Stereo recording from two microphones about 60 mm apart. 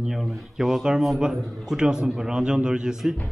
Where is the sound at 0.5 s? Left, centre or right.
Centre.